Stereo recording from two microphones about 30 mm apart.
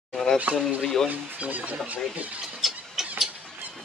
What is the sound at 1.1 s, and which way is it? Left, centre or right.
Speech, right.